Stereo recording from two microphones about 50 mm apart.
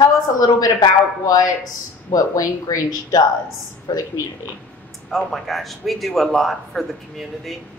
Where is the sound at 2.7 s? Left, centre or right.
Left.